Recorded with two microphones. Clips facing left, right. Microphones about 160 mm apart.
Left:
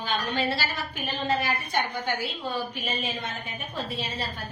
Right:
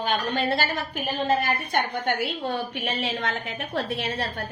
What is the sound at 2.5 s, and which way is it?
A woman's voice, 70° right (ahead or behind).